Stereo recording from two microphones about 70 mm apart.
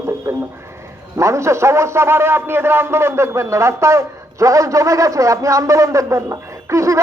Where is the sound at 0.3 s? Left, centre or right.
Right.